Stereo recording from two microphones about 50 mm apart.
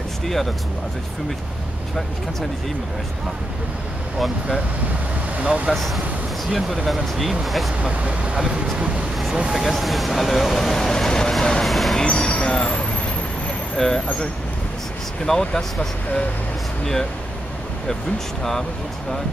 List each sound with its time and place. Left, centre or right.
5.4 s speech: right
6.5 s speech: centre
7.8 s speech: right
9.6 s speech: centre
11.6 s speech: centre
12.0 s vehicle: centre
13.7 s speech: centre
15.2 s speech: centre